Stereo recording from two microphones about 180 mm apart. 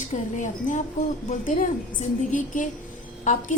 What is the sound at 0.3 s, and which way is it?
A woman's voice, 45° left (ahead or behind).